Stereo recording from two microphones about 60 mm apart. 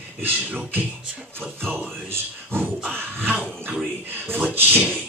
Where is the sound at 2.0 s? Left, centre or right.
Right.